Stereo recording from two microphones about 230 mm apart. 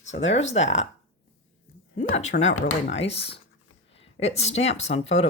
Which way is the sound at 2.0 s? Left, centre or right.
Left.